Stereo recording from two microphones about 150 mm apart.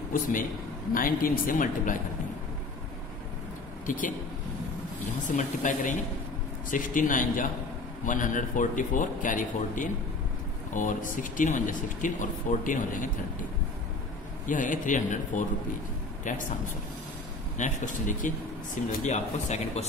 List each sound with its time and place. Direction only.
0.1 s speech: 65° left (ahead or behind)
3.8 s speech: 60° left (ahead or behind)
5.2 s speech: 55° left (ahead or behind)
14.4 s speech: 60° left (ahead or behind)